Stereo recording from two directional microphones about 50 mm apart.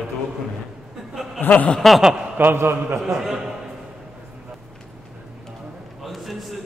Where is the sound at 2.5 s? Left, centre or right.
Right.